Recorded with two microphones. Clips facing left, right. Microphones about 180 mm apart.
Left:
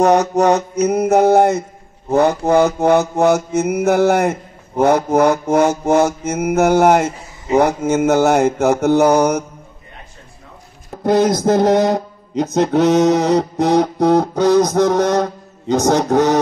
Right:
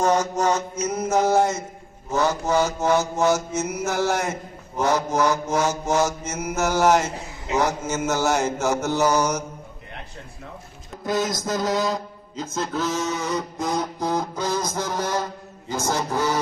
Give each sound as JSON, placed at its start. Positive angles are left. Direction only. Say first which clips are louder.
{"t": 0.0, "sound": "mantra", "louder": "left 8 dB", "side_deg": 65}
{"t": 11.1, "sound": "a man's voice", "louder": "left 11 dB", "side_deg": 70}